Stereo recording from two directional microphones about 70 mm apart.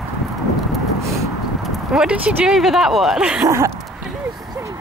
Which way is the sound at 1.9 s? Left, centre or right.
Centre.